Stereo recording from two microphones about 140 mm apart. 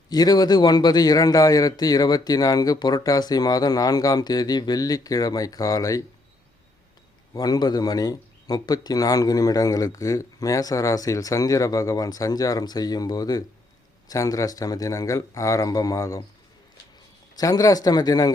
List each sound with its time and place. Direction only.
0.1 s speech: 30° left (ahead or behind)
7.3 s speech: 30° left (ahead or behind)
17.3 s speech: 25° left (ahead or behind)